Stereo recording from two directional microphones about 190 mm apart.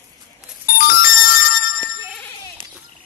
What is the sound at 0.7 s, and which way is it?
Music, 50° left (ahead or behind).